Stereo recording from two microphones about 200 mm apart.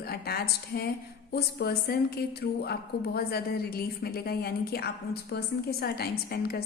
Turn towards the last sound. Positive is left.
turn(degrees=50)  # may be behind; listen again after turning